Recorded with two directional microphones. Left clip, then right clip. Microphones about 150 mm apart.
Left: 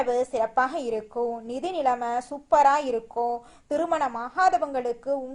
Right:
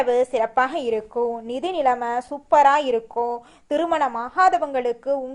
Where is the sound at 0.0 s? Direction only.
20° right (ahead or behind).